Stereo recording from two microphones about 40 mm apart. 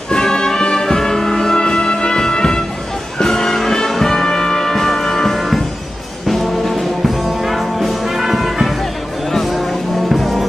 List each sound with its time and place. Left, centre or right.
0.1 s music: centre
3.9 s brass instrument: centre
6.2 s music: centre
10.1 s music: centre